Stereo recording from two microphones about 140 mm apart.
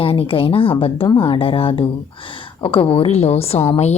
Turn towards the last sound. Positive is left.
turn(degrees=45)  # may be behind; listen again after turning